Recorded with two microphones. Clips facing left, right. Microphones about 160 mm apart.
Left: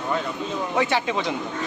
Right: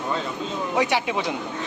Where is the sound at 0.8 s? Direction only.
10° right (ahead or behind).